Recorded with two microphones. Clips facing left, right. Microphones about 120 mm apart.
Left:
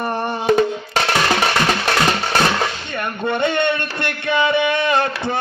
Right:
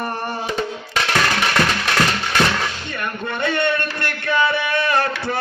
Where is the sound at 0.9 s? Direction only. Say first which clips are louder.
Left 2 dB; 35° left (ahead or behind).